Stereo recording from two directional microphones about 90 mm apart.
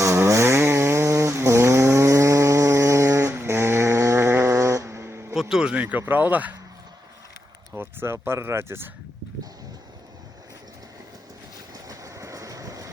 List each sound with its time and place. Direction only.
0.0 s chainsaw: 35° right (ahead or behind)
5.3 s speech: 5° right (ahead or behind)
7.8 s speech: 25° right (ahead or behind)
11.7 s train: 40° right (ahead or behind)